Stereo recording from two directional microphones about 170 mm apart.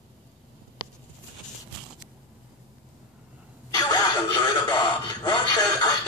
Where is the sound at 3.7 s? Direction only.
25° left (ahead or behind).